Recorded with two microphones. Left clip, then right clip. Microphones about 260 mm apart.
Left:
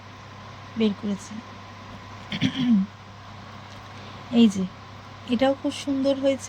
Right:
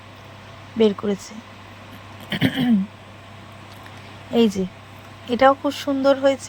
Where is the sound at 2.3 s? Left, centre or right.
Centre.